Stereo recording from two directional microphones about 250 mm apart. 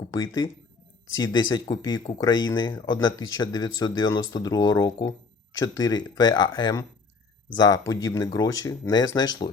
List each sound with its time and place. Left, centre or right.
0.1 s speech: centre